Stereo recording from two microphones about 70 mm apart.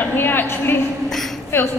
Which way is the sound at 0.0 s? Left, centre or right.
Left.